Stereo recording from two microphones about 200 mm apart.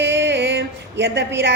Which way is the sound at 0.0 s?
60° right (ahead or behind).